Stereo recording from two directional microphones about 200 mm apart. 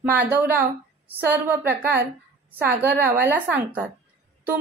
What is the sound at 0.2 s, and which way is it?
A woman's voice, 10° right (ahead or behind).